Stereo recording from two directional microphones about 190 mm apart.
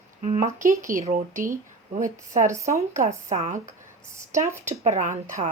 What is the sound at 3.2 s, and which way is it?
Speech, 40° right (ahead or behind).